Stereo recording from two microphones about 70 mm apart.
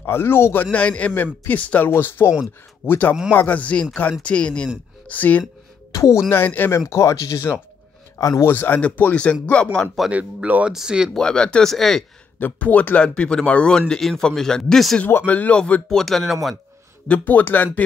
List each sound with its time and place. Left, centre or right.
0.0 s a man's voice: left
0.7 s a man's voice: centre
5.9 s speech: left
6.3 s speech: left
6.9 s speech: left
8.5 s speech: left; by 9.8 s centre
10.1 s speech: right
10.7 s speech: centre
11.1 s speech: centre
12.4 s speech: left; by 15.0 s centre
15.2 s speech: left; by 16.3 s centre
17.1 s speech: left